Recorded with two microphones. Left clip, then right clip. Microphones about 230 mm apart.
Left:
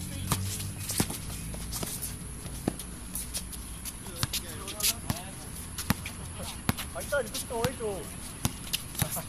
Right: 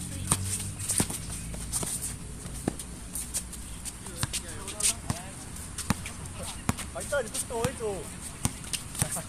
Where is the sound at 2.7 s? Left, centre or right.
Centre.